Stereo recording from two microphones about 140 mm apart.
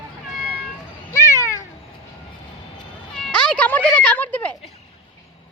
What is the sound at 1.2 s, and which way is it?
Cat, 20° left (ahead or behind).